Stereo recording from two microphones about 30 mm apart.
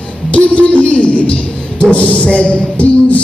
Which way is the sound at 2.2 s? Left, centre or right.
Left.